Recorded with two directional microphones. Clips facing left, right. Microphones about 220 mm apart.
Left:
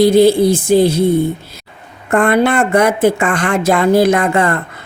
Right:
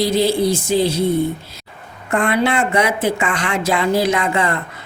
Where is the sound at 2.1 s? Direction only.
50° left (ahead or behind).